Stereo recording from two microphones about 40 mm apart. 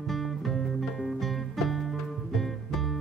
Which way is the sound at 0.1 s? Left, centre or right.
Centre.